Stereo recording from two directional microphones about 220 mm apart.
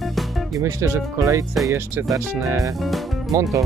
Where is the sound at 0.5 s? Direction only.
15° right (ahead or behind).